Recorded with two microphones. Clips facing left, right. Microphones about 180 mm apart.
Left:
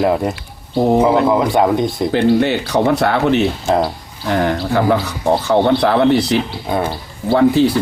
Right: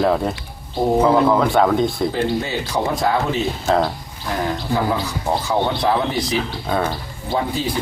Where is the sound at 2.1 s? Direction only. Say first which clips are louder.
Left 8 dB; 75° left (ahead or behind).